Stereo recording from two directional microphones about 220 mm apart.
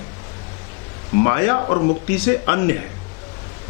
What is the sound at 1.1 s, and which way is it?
Speech, 15° left (ahead or behind).